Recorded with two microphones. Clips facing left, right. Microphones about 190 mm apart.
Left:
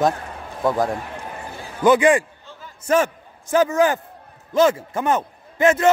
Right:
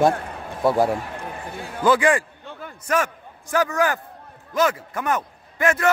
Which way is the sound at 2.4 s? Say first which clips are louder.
Right 5 dB; 60° right (ahead or behind).